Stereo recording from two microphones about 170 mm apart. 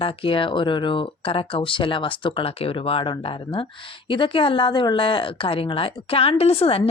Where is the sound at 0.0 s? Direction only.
30° left (ahead or behind).